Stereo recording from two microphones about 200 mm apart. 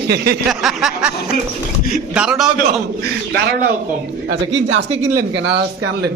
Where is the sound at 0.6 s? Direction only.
Centre (ahead or behind).